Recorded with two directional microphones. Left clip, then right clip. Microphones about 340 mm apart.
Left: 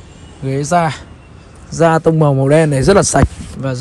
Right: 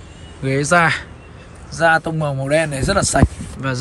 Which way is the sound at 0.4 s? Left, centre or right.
Centre.